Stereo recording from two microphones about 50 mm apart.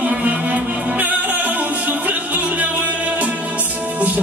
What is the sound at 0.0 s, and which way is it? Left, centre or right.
Music, right.